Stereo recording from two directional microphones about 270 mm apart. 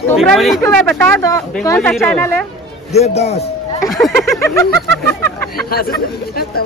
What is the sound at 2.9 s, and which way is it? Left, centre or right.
Speech, left.